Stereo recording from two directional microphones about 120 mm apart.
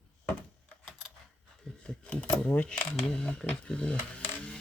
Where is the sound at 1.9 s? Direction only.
10° left (ahead or behind).